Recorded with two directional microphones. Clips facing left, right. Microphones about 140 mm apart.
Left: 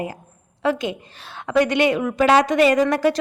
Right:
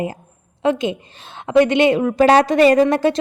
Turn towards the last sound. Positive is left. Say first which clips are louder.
# right 3 dB
turn(degrees=-25)  # may be behind; listen again after turning